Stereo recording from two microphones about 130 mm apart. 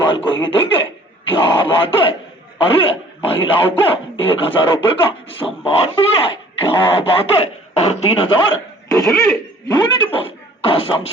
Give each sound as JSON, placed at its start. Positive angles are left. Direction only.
{"t": 0.3, "sound": "speech", "side_deg": 40}
{"t": 9.0, "sound": "cough", "side_deg": 0}
{"t": 9.6, "sound": "speech", "side_deg": 30}
{"t": 10.1, "sound": "speech", "side_deg": 45}